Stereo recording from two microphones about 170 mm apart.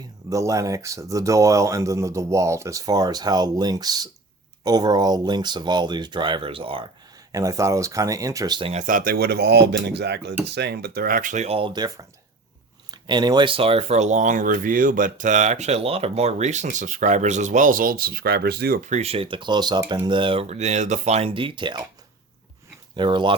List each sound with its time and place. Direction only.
0.3 s speech: 20° right (ahead or behind)
7.3 s speech: 20° right (ahead or behind)
8.7 s speech: 50° right (ahead or behind); by 18.8 s 65° right (ahead or behind)
18.9 s speech: 40° right (ahead or behind)
23.0 s speech: 25° right (ahead or behind)